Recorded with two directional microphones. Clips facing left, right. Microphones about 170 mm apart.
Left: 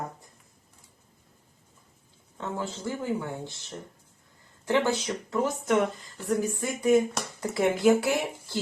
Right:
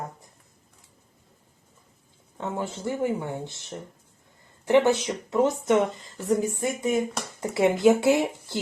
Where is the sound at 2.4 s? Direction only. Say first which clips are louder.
Right 2 dB; 20° right (ahead or behind).